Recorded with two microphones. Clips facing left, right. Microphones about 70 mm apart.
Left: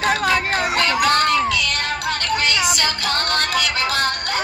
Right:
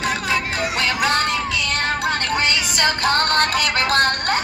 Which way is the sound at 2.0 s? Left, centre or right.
Right.